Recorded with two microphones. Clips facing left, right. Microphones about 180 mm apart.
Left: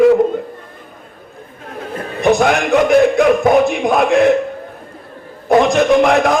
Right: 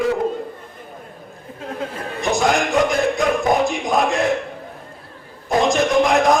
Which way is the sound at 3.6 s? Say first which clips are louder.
Left 5 dB; 60° left (ahead or behind).